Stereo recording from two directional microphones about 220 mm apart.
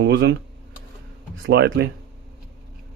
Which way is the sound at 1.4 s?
50° right (ahead or behind).